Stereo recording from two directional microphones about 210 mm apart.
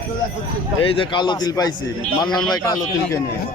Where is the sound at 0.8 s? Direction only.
25° left (ahead or behind).